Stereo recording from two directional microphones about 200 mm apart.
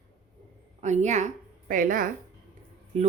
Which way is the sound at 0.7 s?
35° right (ahead or behind).